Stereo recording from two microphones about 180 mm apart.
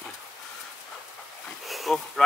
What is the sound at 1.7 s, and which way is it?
Bee, centre (ahead or behind).